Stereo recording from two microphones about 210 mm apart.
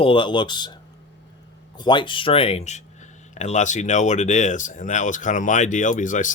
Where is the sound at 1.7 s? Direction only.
20° left (ahead or behind).